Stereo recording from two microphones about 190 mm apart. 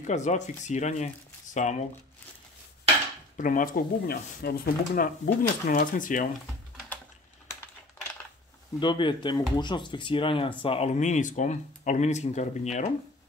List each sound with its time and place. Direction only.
0.0 s speech: 40° left (ahead or behind)
3.3 s speech: 45° left (ahead or behind)
8.7 s speech: 25° left (ahead or behind)